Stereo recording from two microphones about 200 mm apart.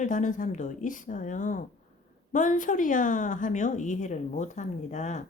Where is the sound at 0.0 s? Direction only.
40° left (ahead or behind).